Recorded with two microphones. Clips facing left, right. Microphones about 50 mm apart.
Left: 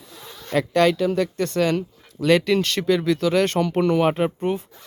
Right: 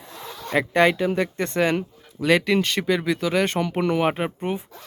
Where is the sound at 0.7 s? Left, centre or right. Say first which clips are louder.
Left 1 dB; right.